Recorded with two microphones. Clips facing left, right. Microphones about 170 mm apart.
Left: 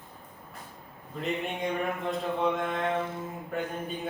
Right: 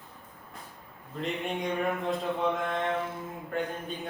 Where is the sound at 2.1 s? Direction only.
Centre (ahead or behind).